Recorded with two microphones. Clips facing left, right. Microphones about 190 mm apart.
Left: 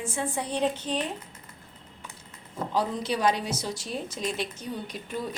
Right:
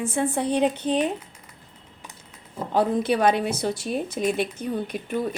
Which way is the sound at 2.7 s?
55° right (ahead or behind).